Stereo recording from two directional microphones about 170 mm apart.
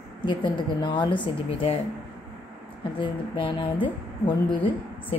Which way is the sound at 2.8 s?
30° left (ahead or behind).